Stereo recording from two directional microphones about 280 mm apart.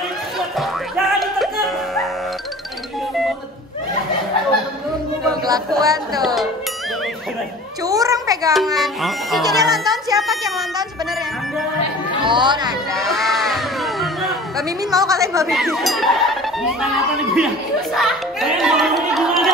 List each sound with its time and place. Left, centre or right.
0.6 s music: centre
5.2 s a sound: centre
5.8 s a child's voice: centre
6.2 s speech: centre
7.8 s a child's voice: centre
8.7 s speech: centre
12.2 s speech: centre
12.9 s music: centre
14.8 s a child's voice: centre
15.4 s speech: centre
17.9 s speech: centre